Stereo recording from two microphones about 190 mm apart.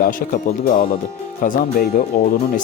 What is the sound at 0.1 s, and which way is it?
Speech, 45° left (ahead or behind).